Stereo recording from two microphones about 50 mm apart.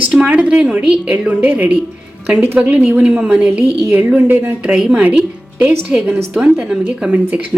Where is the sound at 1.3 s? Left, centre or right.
Right.